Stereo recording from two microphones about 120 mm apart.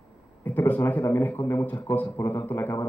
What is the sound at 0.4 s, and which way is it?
Speech, 15° left (ahead or behind).